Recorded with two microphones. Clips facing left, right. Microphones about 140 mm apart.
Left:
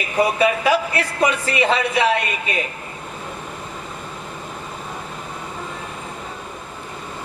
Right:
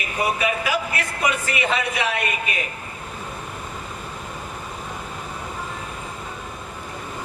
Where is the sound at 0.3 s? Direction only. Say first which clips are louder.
Left 6 dB; 30° left (ahead or behind).